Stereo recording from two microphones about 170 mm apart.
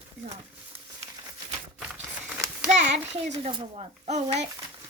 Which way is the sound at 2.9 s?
40° right (ahead or behind).